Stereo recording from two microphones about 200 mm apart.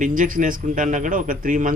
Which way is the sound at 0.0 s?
40° right (ahead or behind).